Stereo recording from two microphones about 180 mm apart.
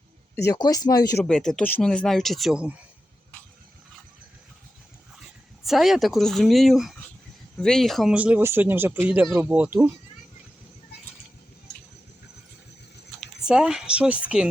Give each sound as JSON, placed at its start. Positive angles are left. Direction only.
{"t": 0.4, "sound": "speech", "side_deg": 20}
{"t": 1.2, "sound": "speech", "side_deg": 5}
{"t": 5.2, "sound": "speech", "side_deg": 0}
{"t": 13.1, "sound": "speech", "side_deg": -5}